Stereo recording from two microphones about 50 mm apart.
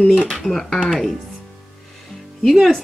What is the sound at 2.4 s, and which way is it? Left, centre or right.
Speech, centre.